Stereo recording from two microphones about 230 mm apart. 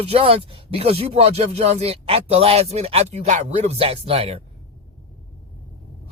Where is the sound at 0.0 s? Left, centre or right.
Right.